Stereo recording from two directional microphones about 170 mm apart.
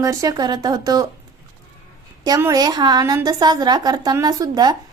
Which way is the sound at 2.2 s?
20° right (ahead or behind).